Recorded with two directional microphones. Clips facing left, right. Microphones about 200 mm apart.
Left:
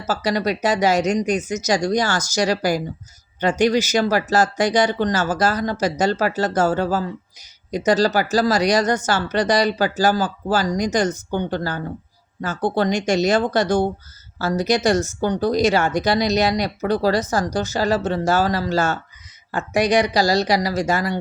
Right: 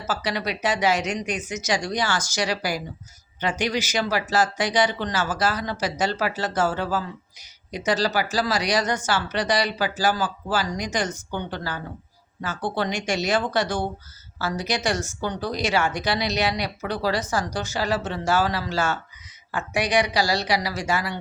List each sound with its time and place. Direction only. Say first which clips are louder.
0.1 s speech: left 6 dB; 40° left (ahead or behind)